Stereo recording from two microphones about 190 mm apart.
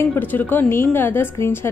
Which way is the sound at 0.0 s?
10° left (ahead or behind).